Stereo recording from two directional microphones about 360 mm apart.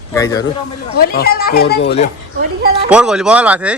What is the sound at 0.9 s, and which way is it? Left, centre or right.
Speech, left.